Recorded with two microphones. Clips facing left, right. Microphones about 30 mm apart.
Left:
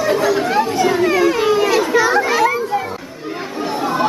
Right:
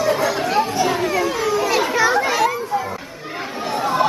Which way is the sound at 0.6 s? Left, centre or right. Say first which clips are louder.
Left 3 dB; centre.